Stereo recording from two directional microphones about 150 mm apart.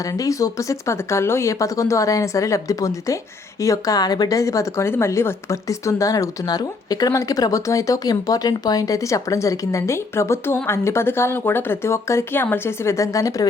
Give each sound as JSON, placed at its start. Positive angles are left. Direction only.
{"t": 0.1, "sound": "a woman's voice", "side_deg": 20}